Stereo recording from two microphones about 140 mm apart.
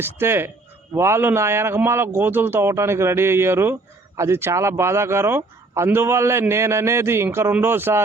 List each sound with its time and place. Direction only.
0.0 s speech: 15° right (ahead or behind)